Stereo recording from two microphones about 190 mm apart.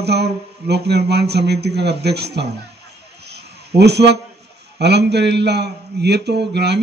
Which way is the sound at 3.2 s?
60° right (ahead or behind).